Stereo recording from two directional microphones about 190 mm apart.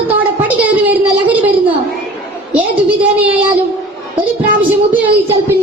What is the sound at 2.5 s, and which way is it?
Speech, 10° right (ahead or behind).